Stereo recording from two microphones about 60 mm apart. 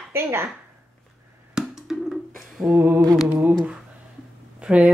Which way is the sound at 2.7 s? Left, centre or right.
Right.